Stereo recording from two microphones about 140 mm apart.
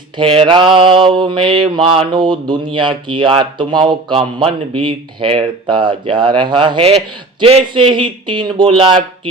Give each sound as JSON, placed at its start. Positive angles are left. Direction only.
{"t": 0.2, "sound": "mantra", "side_deg": -35}